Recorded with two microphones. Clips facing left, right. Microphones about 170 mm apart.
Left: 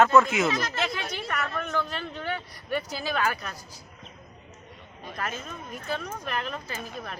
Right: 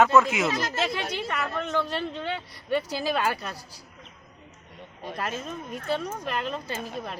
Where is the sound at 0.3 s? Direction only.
10° right (ahead or behind).